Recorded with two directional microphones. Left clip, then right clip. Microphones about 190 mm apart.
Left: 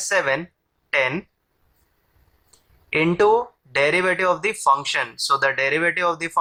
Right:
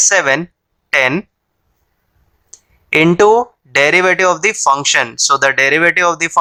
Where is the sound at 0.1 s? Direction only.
45° right (ahead or behind).